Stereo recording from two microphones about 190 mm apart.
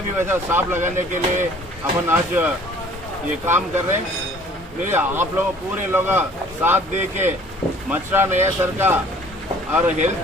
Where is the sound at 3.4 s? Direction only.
10° right (ahead or behind).